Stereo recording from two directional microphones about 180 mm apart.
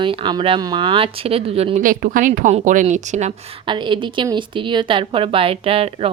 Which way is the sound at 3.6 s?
25° right (ahead or behind).